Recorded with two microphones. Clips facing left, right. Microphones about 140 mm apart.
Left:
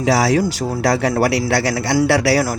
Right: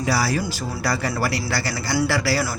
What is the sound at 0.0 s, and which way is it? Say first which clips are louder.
A man's voice: left 7 dB; 90° left.